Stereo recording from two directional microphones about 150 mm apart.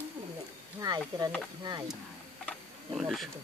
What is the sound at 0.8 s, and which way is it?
Speech, 25° right (ahead or behind).